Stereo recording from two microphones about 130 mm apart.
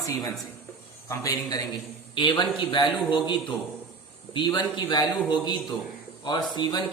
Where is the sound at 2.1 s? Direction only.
35° left (ahead or behind).